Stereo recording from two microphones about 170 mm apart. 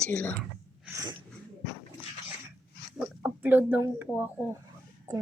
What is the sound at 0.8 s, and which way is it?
Sneeze, 20° right (ahead or behind).